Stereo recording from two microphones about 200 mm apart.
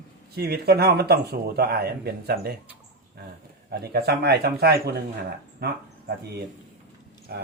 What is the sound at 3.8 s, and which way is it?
Speech, 55° right (ahead or behind).